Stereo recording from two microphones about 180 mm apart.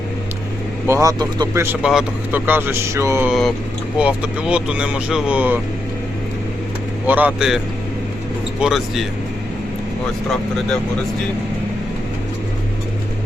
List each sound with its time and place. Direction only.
0.9 s speech: 15° right (ahead or behind)
7.1 s speech: 10° right (ahead or behind)
8.6 s speech: centre (ahead or behind)